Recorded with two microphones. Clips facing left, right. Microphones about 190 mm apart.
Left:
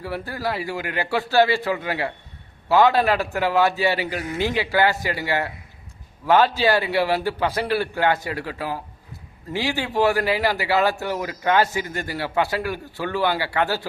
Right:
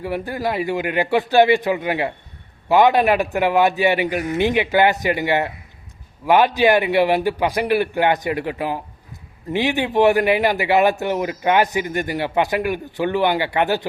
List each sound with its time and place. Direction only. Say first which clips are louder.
0.0 s a man's voice: right 4 dB; 20° right (ahead or behind)